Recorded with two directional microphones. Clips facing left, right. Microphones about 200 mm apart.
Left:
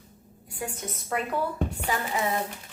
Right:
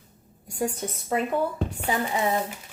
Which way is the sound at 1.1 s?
25° right (ahead or behind).